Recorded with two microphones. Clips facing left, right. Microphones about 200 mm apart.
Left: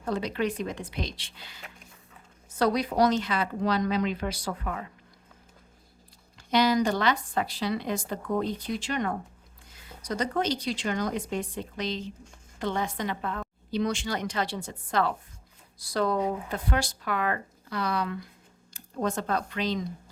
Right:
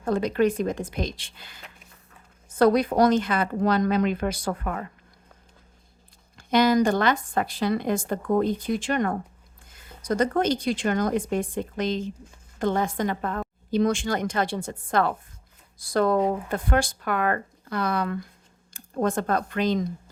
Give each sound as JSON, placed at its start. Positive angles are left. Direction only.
{"t": 0.0, "sound": "speech", "side_deg": -50}
{"t": 6.3, "sound": "speech", "side_deg": -50}